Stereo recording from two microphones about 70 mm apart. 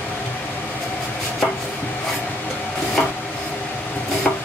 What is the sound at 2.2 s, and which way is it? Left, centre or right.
Train, left.